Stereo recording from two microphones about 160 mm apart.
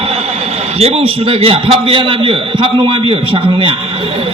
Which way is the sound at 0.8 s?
40° right (ahead or behind).